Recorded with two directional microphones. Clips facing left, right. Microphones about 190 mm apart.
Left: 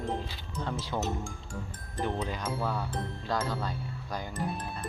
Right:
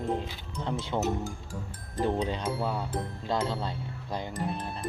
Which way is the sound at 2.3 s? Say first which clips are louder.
Right 2 dB; 25° right (ahead or behind).